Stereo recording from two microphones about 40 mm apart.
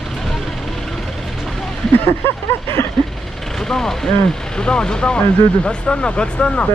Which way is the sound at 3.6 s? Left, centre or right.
Centre.